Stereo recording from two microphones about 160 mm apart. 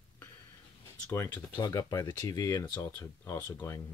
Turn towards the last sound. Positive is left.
turn(degrees=15)  # may be behind; listen again after turning